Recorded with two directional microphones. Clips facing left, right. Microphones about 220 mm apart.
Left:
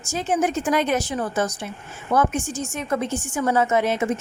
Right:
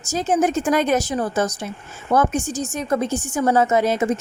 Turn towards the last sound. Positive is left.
turn(degrees=-40)  # may be behind; listen again after turning